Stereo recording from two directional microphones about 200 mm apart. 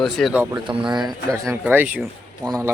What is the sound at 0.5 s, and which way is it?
Speech, 25° right (ahead or behind).